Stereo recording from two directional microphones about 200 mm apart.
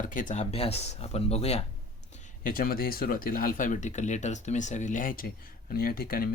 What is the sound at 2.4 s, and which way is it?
Speech, 45° left (ahead or behind).